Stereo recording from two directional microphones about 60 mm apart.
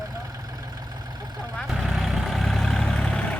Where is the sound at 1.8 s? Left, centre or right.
Centre.